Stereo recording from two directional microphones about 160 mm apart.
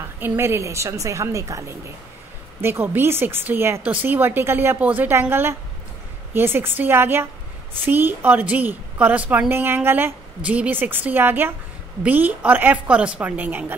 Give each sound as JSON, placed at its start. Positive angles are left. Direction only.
{"t": 0.2, "sound": "a woman's voice", "side_deg": -15}